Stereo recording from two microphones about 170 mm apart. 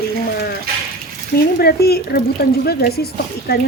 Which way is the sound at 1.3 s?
65° left (ahead or behind).